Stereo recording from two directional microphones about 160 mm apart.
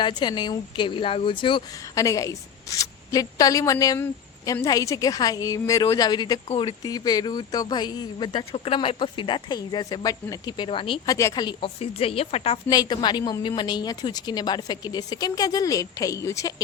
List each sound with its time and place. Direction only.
0.0 s speech: 30° left (ahead or behind)
6.5 s speech: 40° left (ahead or behind)
6.8 s speech: 25° left (ahead or behind)
12.6 s speech: 25° left (ahead or behind)